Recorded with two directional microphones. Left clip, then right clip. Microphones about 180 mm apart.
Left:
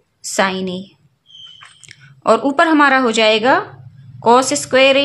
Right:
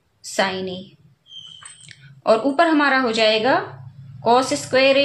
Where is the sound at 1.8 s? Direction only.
50° left (ahead or behind).